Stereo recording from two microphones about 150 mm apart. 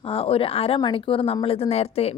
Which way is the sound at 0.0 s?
40° left (ahead or behind).